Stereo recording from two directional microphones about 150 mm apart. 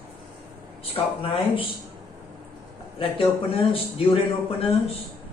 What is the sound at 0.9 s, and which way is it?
Speech, 40° left (ahead or behind).